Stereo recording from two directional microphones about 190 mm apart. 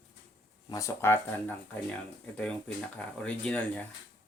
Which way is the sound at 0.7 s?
15° left (ahead or behind).